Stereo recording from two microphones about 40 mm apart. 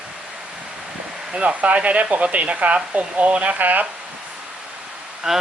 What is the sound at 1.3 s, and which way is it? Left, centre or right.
Speech, right.